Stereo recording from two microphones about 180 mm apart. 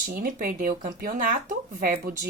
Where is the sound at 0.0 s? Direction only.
55° right (ahead or behind).